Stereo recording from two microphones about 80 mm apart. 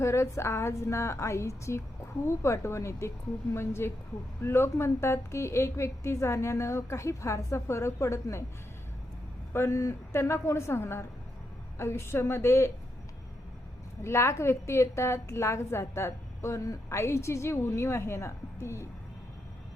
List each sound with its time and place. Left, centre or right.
0.0 s a woman's voice: left
9.5 s a woman's voice: left
14.0 s a woman's voice: left